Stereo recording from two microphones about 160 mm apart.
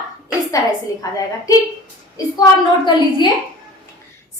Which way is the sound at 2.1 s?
25° left (ahead or behind).